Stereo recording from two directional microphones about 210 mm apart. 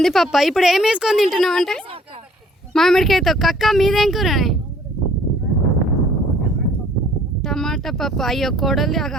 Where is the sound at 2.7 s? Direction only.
Centre (ahead or behind).